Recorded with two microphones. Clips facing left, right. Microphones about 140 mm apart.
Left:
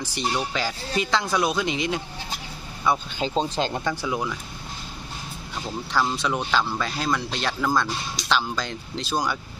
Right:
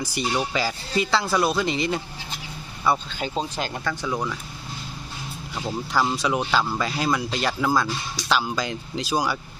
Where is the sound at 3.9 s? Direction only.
10° left (ahead or behind).